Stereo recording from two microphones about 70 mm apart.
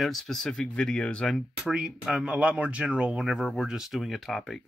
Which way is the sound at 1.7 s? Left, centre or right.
Centre.